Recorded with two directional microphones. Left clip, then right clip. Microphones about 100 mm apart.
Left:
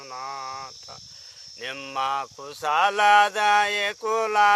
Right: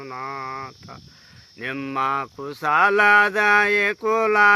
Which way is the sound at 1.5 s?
35° left (ahead or behind).